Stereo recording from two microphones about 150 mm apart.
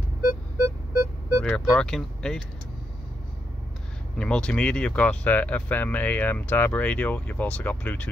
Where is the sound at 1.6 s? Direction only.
5° left (ahead or behind).